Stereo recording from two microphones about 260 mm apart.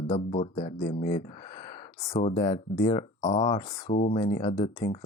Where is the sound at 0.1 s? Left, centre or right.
Left.